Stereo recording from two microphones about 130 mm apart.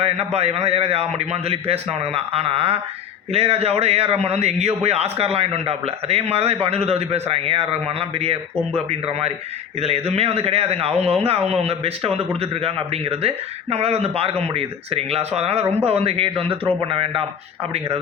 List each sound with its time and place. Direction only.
0.0 s speech: 55° right (ahead or behind)